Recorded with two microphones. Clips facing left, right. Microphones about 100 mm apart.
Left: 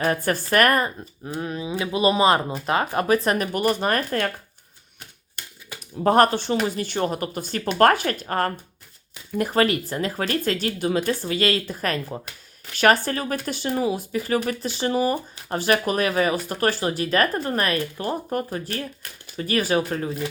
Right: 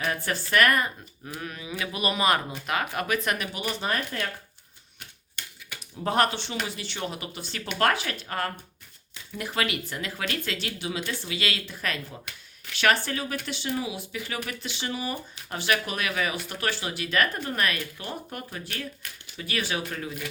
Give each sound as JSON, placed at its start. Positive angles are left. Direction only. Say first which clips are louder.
{"t": 0.0, "sound": "speech", "louder": "left 7 dB", "side_deg": 45}
{"t": 1.2, "sound": "speech", "louder": "left 8 dB", "side_deg": 25}
{"t": 5.4, "sound": "a sound", "louder": "left 2 dB", "side_deg": 35}
{"t": 6.0, "sound": "speech", "louder": "left 8 dB", "side_deg": 45}